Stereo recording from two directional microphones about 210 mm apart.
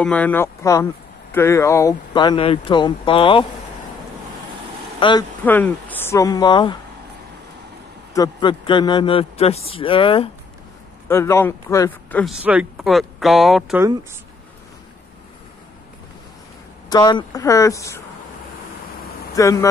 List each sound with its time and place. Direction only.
0.0 s a man's voice: 5° left (ahead or behind); by 3.4 s 25° left (ahead or behind)
5.0 s a man's voice: 25° left (ahead or behind)
5.4 s speech: 10° left (ahead or behind)
8.1 s a man's voice: 20° left (ahead or behind)
11.1 s speech: 10° left (ahead or behind)
12.4 s speech: 5° right (ahead or behind)
16.9 s speech: 20° left (ahead or behind)
19.3 s speech: 15° left (ahead or behind)